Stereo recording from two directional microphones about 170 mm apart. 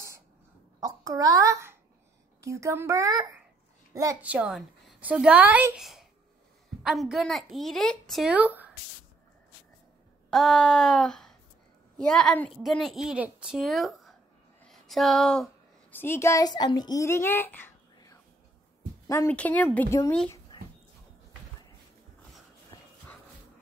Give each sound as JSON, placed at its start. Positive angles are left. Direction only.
{"t": 0.7, "sound": "a child's voice", "side_deg": -20}
{"t": 4.2, "sound": "a woman's voice", "side_deg": -10}
{"t": 10.3, "sound": "a woman's voice", "side_deg": 0}
{"t": 17.9, "sound": "whispering", "side_deg": 20}
{"t": 19.0, "sound": "a woman's voice", "side_deg": 15}
{"t": 20.5, "sound": "a sound", "side_deg": 25}
{"t": 22.7, "sound": "dog", "side_deg": 20}